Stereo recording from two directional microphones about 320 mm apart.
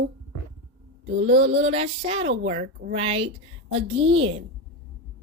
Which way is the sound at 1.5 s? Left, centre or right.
Centre.